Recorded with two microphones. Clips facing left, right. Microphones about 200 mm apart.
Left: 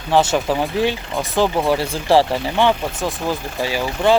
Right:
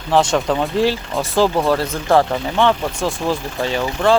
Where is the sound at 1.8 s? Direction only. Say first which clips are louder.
Even; 30° left (ahead or behind).